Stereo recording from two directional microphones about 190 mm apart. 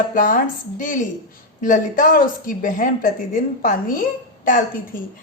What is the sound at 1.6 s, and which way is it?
A woman's voice, 45° left (ahead or behind).